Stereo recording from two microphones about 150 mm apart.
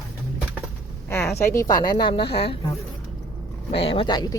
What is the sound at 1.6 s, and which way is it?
Speech, 25° left (ahead or behind).